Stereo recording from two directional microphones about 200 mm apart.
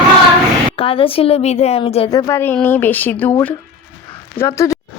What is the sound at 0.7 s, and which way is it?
Speech, 25° left (ahead or behind).